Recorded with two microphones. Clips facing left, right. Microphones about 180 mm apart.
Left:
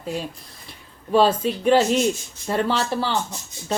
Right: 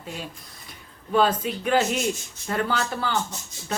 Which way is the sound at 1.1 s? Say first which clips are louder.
Left 4 dB; 30° left (ahead or behind).